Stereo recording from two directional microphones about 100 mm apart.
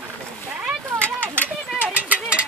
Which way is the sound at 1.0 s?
20° right (ahead or behind).